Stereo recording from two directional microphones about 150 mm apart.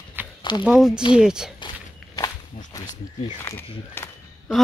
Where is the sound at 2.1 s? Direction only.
25° left (ahead or behind).